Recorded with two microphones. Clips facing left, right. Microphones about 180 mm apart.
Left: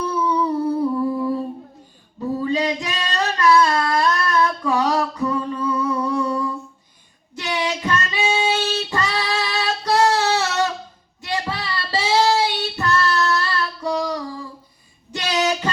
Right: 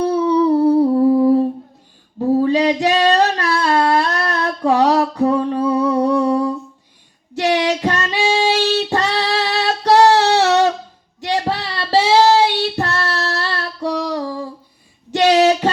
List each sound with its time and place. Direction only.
0.0 s humming: 70° right (ahead or behind)
2.1 s female singing: 65° right (ahead or behind)
7.3 s child singing: 70° right (ahead or behind)
15.1 s female singing: 70° right (ahead or behind)